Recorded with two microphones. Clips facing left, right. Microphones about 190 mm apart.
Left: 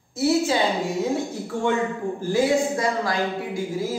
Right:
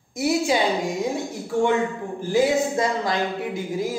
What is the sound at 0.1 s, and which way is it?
Speech, 15° right (ahead or behind).